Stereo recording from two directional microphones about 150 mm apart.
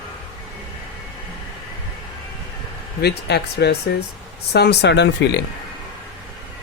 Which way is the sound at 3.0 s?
90° left.